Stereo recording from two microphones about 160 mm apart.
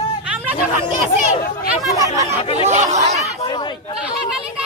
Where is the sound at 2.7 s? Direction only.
50° right (ahead or behind).